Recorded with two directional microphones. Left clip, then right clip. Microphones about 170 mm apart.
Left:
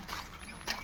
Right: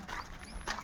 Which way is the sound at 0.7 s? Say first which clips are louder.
Left 1 dB; 10° left (ahead or behind).